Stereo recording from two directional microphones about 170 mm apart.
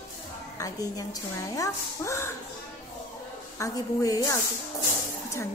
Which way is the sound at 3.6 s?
20° left (ahead or behind).